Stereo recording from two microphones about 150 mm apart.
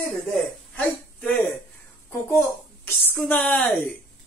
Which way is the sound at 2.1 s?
15° left (ahead or behind).